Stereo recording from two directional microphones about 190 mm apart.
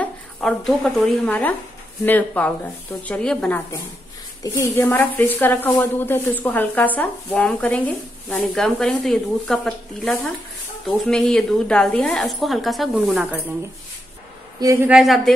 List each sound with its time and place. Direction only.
0.0 s a woman's voice: 5° left (ahead or behind)
14.6 s a woman's voice: 15° right (ahead or behind)
14.9 s a woman's voice: centre (ahead or behind)